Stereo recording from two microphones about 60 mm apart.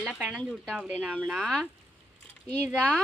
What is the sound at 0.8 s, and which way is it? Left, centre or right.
Speech, right.